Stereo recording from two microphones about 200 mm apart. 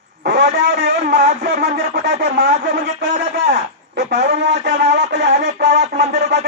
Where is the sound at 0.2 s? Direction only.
60° right (ahead or behind).